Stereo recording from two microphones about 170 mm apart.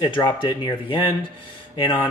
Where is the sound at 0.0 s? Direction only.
25° left (ahead or behind).